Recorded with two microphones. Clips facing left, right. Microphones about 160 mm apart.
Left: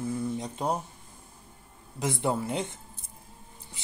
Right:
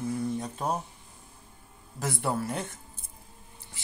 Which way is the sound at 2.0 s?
20° left (ahead or behind).